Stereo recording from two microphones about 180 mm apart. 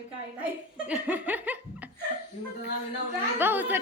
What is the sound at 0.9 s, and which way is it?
Laughter, 10° right (ahead or behind).